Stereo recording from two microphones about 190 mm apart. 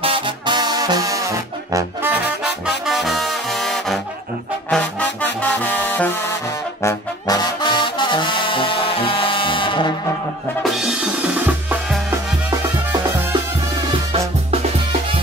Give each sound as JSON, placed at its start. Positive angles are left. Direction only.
{"t": 0.0, "sound": "music", "side_deg": -25}
{"t": 1.7, "sound": "brass instrument", "side_deg": -15}
{"t": 4.6, "sound": "music", "side_deg": 5}
{"t": 10.6, "sound": "drum", "side_deg": -5}
{"t": 14.1, "sound": "music", "side_deg": -30}